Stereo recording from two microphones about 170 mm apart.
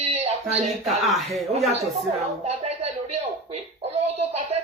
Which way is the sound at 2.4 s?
35° right (ahead or behind).